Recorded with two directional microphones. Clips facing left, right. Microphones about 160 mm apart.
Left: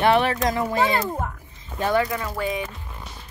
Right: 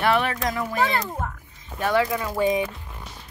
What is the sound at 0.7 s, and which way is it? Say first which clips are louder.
Speech: left 2 dB; 20° left (ahead or behind).